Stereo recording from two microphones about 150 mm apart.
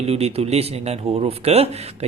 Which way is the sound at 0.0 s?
45° right (ahead or behind).